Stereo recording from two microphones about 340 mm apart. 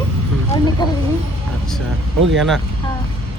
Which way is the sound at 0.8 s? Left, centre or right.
Centre.